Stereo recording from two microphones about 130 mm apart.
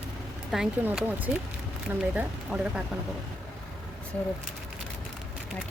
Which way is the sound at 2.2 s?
10° right (ahead or behind).